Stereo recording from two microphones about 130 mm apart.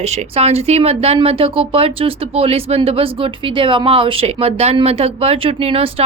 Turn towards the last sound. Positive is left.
turn(degrees=-50)  # may be behind; listen again after turning